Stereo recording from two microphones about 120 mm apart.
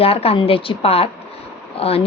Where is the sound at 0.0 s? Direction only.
55° left (ahead or behind).